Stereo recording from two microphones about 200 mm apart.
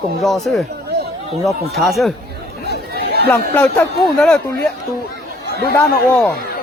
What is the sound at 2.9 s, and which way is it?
Chatter, 55° right (ahead or behind).